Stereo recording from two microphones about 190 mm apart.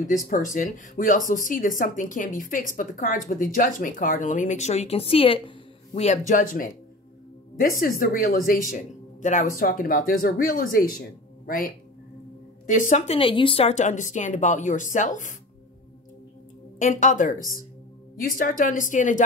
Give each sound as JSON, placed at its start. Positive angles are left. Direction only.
{"t": 0.0, "sound": "speech", "side_deg": 45}
{"t": 5.9, "sound": "speech", "side_deg": 40}
{"t": 16.7, "sound": "speech", "side_deg": 40}